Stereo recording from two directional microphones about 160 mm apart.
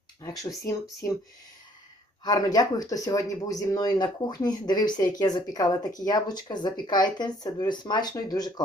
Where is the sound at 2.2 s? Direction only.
25° left (ahead or behind).